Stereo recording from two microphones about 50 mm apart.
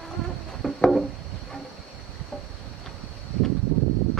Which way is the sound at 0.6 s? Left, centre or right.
Centre.